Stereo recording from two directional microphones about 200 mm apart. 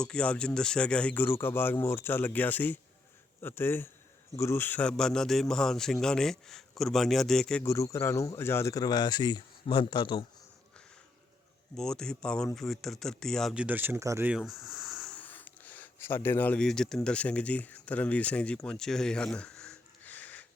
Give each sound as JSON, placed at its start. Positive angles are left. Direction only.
{"t": 0.0, "sound": "a man's voice", "side_deg": 5}
{"t": 7.6, "sound": "speech", "side_deg": 15}
{"t": 11.8, "sound": "a man's voice", "side_deg": 5}